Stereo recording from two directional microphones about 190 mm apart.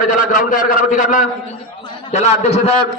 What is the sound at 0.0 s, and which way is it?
A man's voice, 45° left (ahead or behind).